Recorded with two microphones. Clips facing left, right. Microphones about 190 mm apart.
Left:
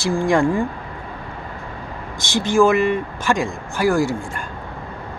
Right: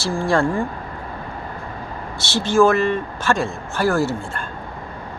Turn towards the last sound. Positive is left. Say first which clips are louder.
# left 1 dB
turn(degrees=15)  # may be behind; listen again after turning